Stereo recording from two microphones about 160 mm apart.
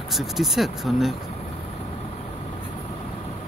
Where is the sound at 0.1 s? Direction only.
Centre (ahead or behind).